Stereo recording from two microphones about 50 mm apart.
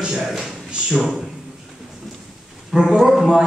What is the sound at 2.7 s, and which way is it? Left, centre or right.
Speech, centre.